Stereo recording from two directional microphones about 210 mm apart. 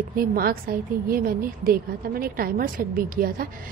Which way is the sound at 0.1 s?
45° right (ahead or behind).